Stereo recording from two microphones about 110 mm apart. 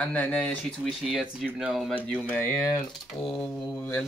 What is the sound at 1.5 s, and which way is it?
Speech, centre (ahead or behind).